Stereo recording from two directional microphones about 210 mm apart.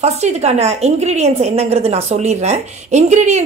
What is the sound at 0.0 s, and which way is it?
A woman's voice, 30° right (ahead or behind).